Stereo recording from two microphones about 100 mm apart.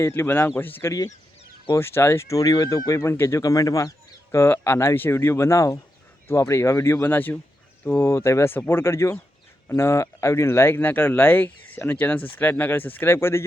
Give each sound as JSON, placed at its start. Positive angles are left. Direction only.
{"t": 0.0, "sound": "speech", "side_deg": 25}